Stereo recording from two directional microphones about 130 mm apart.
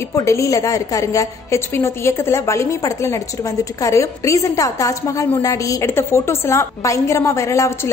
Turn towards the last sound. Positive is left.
turn(degrees=20)  # may be behind; listen again after turning